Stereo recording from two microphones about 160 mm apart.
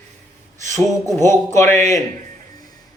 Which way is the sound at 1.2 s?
15° left (ahead or behind).